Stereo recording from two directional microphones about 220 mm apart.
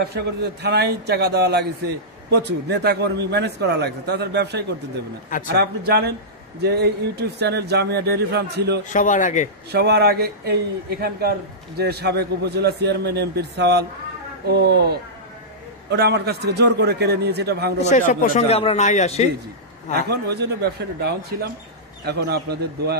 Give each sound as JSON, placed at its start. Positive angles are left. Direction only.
{"t": 0.1, "sound": "a man's voice", "side_deg": -50}
{"t": 8.8, "sound": "speech", "side_deg": 35}
{"t": 9.7, "sound": "a man's voice", "side_deg": -45}
{"t": 17.8, "sound": "speech", "side_deg": 35}
{"t": 19.9, "sound": "a man's voice", "side_deg": -45}